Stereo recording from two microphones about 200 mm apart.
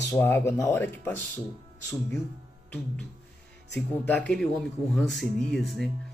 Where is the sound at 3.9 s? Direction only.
10° left (ahead or behind).